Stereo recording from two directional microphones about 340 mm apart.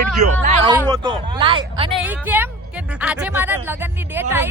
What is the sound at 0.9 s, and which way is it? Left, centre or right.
Speech, centre.